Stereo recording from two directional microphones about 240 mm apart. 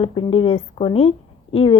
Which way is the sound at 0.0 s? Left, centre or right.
Left.